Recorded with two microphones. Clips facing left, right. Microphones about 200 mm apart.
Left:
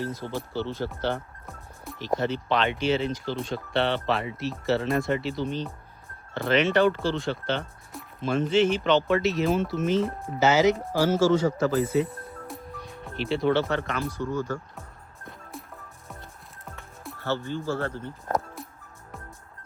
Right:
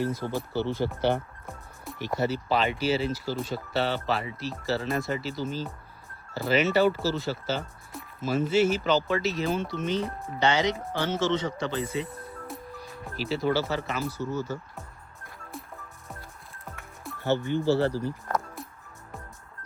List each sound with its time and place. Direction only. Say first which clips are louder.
0.0 s speech: right 2 dB; 10° right (ahead or behind)
15.5 s music: even; centre (ahead or behind)
17.2 s speech: right 3 dB; 15° right (ahead or behind)
17.7 s speech: right 5 dB; 30° right (ahead or behind)